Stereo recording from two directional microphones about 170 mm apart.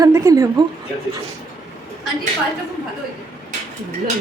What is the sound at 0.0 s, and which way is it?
Speech, 20° right (ahead or behind).